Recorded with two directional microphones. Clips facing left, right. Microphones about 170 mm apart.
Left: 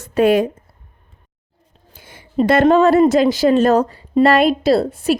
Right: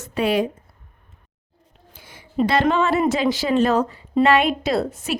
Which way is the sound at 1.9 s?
50° left (ahead or behind).